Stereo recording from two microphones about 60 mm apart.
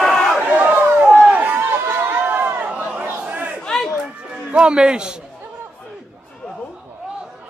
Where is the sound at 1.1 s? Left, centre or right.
Right.